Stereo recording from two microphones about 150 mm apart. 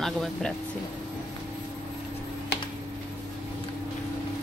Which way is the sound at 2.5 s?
90° left.